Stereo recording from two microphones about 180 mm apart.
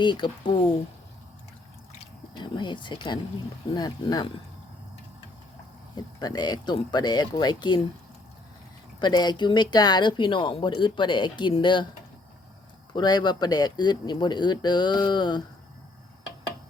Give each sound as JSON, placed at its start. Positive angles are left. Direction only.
{"t": 0.0, "sound": "speech", "side_deg": 25}
{"t": 2.4, "sound": "speech", "side_deg": 25}
{"t": 6.1, "sound": "speech", "side_deg": 20}
{"t": 9.0, "sound": "speech", "side_deg": 25}
{"t": 12.9, "sound": "speech", "side_deg": 25}